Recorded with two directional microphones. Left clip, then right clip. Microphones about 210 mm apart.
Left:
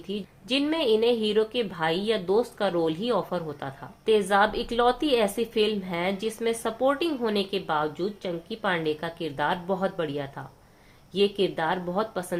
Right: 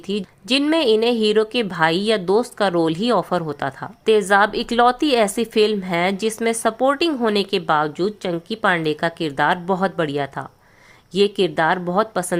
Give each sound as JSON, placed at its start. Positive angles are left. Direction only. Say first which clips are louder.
{"t": 0.1, "sound": "speech", "louder": "right 8 dB", "side_deg": -45}